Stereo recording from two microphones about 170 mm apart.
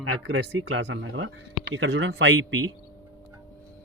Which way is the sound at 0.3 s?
85° right.